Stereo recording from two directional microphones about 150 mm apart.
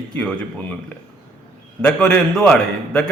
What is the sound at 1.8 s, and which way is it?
A man's voice, 5° left (ahead or behind).